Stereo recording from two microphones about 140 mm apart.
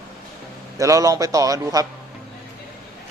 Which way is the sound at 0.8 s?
25° right (ahead or behind).